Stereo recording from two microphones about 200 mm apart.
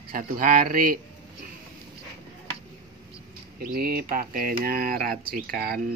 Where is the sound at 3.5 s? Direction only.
50° right (ahead or behind).